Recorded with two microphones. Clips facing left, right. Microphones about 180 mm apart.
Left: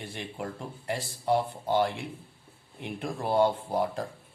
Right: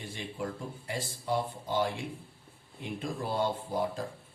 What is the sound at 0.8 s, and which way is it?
Speech, 65° left (ahead or behind).